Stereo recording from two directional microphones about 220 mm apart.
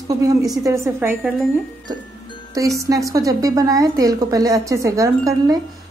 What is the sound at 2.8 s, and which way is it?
A woman's voice, 15° right (ahead or behind).